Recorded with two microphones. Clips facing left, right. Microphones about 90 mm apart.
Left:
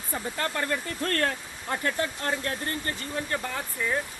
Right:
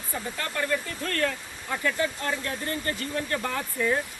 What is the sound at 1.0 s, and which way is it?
Speech, 45° left (ahead or behind).